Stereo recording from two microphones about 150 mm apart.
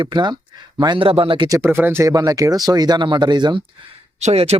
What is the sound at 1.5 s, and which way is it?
Speech, 15° right (ahead or behind).